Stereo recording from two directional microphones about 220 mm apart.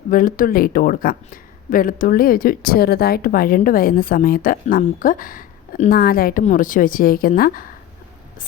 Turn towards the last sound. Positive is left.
turn(degrees=40)  # may be behind; listen again after turning